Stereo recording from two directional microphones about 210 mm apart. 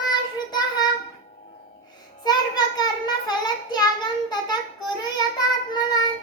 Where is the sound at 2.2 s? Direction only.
20° left (ahead or behind).